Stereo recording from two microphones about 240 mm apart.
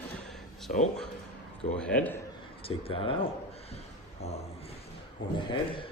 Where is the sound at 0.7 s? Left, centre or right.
Left.